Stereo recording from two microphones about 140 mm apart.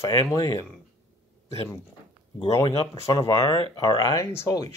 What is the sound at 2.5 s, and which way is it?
Speech, 25° left (ahead or behind).